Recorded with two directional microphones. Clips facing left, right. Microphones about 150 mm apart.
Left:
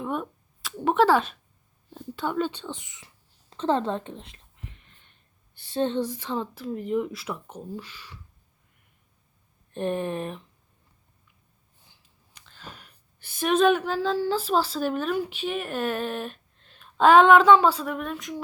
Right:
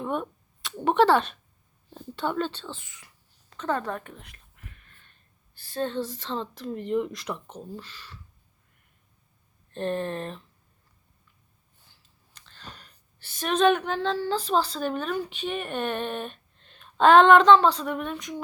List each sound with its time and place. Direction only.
0.0 s speech: 5° left (ahead or behind); by 3.1 s 20° left (ahead or behind)
3.5 s a sound: 25° left (ahead or behind)
5.5 s speech: 20° left (ahead or behind)
9.7 s speech: 15° left (ahead or behind)
12.3 s a woman's voice: 10° left (ahead or behind)